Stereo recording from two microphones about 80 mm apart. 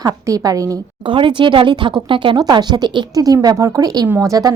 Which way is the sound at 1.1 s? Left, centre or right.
Right.